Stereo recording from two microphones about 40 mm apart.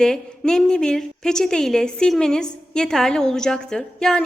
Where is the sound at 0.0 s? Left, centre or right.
Centre.